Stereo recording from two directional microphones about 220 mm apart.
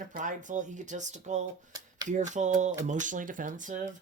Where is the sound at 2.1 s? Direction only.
35° right (ahead or behind).